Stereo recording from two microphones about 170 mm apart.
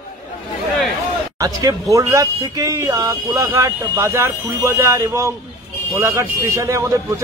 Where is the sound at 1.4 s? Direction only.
20° right (ahead or behind).